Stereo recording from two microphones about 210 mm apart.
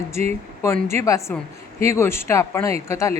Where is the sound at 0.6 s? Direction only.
10° left (ahead or behind).